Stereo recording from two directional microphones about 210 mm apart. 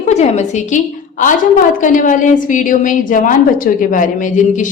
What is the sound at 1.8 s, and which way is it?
A woman's voice, 40° left (ahead or behind).